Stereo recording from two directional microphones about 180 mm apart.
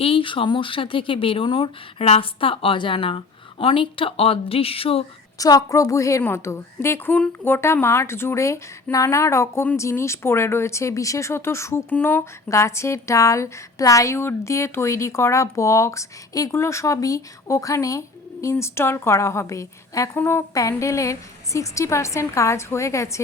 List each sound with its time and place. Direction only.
0.0 s speech: 30° left (ahead or behind)
5.4 s a woman's voice: 20° left (ahead or behind)